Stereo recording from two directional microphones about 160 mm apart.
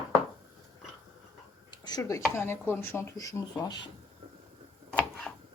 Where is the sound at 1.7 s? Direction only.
25° left (ahead or behind).